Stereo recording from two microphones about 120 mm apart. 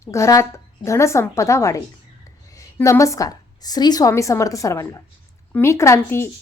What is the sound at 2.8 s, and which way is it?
A woman's voice, 25° left (ahead or behind).